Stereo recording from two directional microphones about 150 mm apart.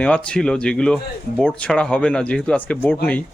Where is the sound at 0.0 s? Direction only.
5° left (ahead or behind).